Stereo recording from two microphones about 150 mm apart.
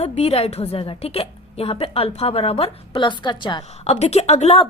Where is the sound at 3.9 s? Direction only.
45° left (ahead or behind).